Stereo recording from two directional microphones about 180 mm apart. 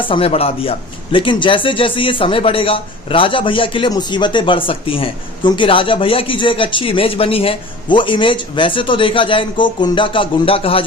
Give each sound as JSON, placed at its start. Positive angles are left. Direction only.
{"t": 0.0, "sound": "a man's voice", "side_deg": 30}